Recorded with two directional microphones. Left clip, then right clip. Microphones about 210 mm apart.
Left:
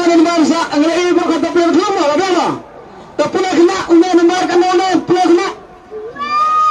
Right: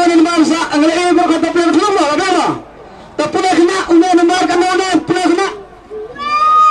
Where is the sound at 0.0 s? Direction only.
35° right (ahead or behind).